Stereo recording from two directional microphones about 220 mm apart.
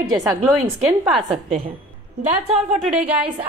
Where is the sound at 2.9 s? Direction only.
5° right (ahead or behind).